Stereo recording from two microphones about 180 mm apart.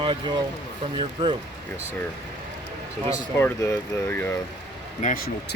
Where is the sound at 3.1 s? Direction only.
15° left (ahead or behind).